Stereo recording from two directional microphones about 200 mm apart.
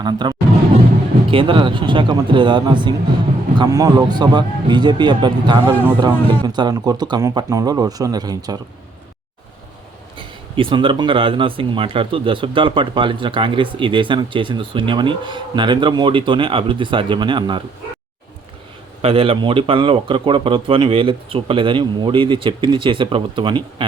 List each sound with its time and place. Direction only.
0.0 s speech: 20° right (ahead or behind)
10.2 s speech: 25° right (ahead or behind)
19.0 s speech: 25° right (ahead or behind)